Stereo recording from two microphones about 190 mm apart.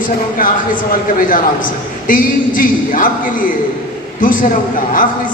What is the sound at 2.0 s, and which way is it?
A man's voice, 45° left (ahead or behind).